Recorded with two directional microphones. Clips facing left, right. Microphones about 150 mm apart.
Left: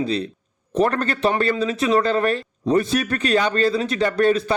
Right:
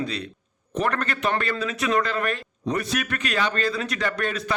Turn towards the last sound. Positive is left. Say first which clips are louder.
# left 9 dB
turn(degrees=30)  # may be behind; listen again after turning